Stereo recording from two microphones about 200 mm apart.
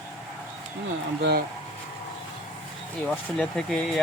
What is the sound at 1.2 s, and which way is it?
Speech, 55° right (ahead or behind).